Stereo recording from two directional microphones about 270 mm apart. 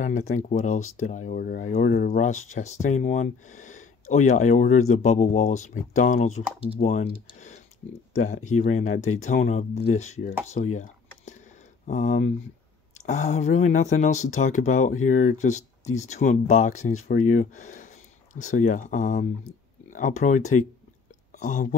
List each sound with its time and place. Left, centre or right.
0.0 s speech: left
0.7 s speech: left
1.0 s speech: left